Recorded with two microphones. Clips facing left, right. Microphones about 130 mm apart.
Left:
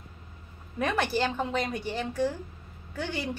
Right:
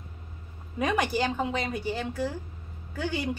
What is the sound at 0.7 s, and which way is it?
A woman's voice, 10° right (ahead or behind).